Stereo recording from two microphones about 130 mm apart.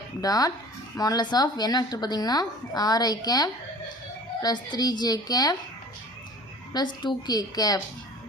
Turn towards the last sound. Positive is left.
turn(degrees=30)  # may be behind; listen again after turning